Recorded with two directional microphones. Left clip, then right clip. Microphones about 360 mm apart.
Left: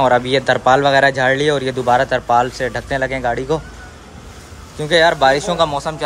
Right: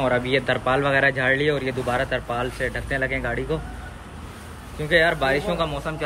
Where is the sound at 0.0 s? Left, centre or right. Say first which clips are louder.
Left 8 dB; centre.